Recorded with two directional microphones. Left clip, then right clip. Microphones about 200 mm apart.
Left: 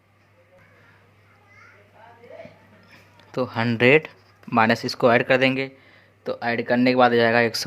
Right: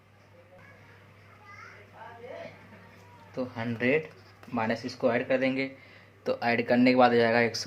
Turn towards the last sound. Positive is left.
turn(degrees=30)  # may be behind; listen again after turning